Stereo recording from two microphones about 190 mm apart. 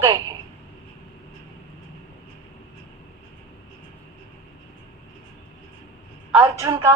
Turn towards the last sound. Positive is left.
turn(degrees=-20)  # may be behind; listen again after turning